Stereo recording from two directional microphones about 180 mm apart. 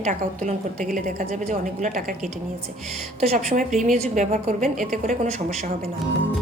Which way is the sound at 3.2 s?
35° right (ahead or behind).